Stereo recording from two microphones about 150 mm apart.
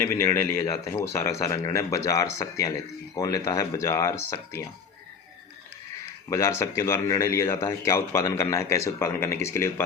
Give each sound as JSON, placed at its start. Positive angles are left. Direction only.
{"t": 0.0, "sound": "speech", "side_deg": 20}
{"t": 6.2, "sound": "speech", "side_deg": 20}